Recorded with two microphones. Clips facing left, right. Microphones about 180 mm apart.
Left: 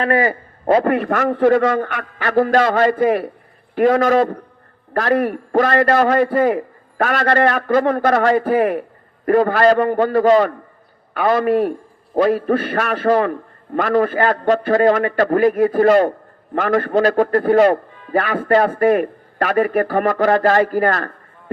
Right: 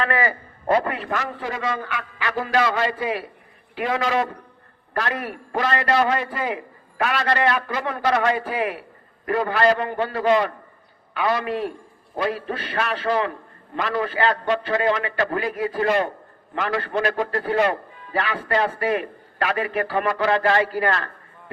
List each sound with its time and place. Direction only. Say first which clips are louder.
0.0 s a man's voice: left 6 dB; 45° left (ahead or behind)
16.9 s a man's voice: left 9 dB; 40° left (ahead or behind)